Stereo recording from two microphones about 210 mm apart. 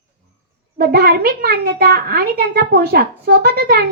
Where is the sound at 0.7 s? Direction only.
45° right (ahead or behind).